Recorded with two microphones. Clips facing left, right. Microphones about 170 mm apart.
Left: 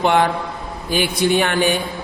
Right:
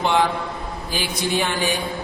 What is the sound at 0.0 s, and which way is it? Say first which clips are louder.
A man's voice: left 3 dB; 55° left (ahead or behind).